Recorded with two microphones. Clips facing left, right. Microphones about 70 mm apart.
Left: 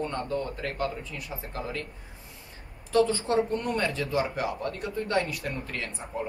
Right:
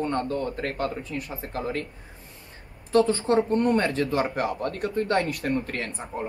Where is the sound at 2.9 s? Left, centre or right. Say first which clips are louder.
Right 3 dB; right.